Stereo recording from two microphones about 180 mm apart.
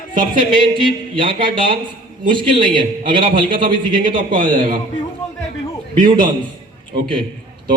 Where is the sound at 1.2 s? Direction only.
25° right (ahead or behind).